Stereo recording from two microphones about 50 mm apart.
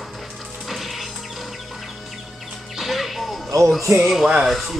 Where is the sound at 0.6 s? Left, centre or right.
Centre.